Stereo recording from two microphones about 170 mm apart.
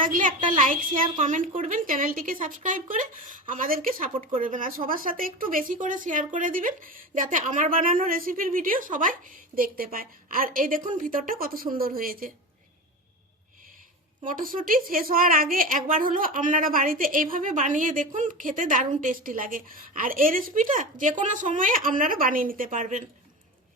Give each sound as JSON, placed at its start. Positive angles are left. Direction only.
{"t": 0.0, "sound": "a woman's voice", "side_deg": -50}
{"t": 14.3, "sound": "a woman's voice", "side_deg": -55}